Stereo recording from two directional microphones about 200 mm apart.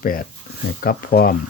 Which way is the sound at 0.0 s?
45° left (ahead or behind).